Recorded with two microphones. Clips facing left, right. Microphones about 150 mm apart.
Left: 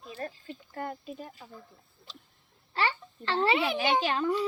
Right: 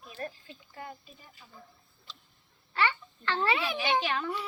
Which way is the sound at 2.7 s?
35° left (ahead or behind).